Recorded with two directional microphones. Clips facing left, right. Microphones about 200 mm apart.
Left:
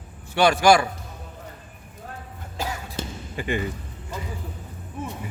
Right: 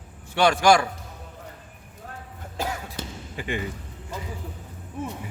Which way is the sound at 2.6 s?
55° right (ahead or behind).